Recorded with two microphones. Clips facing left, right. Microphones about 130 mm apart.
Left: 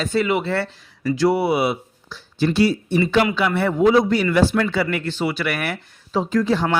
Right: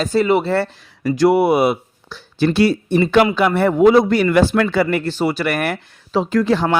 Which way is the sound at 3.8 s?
60° right (ahead or behind).